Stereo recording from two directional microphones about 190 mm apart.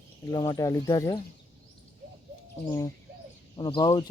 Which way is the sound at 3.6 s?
25° left (ahead or behind).